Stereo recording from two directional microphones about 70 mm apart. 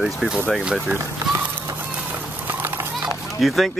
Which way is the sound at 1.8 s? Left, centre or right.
Right.